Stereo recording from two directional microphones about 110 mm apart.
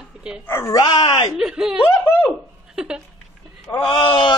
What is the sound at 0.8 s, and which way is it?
Speech, 40° left (ahead or behind).